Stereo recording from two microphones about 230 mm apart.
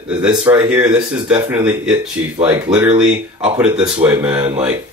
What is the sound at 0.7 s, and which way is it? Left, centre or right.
Speech, centre.